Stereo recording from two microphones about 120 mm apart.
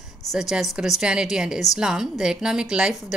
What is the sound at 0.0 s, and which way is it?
A woman's voice, centre (ahead or behind).